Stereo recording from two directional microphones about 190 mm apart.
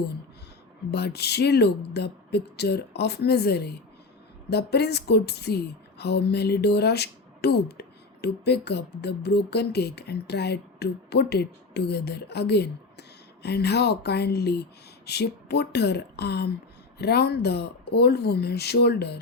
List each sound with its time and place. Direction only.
0.9 s speech: 60° left (ahead or behind)